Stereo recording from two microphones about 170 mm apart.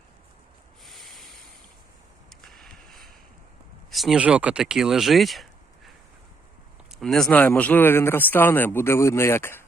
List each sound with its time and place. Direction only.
0.9 s a sound: centre (ahead or behind)
2.5 s vehicle: 5° left (ahead or behind)
3.9 s speech: centre (ahead or behind)
7.0 s speech: 5° left (ahead or behind)